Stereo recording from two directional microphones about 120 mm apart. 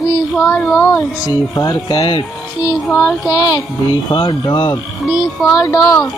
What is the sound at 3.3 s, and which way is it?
Speech, 30° left (ahead or behind).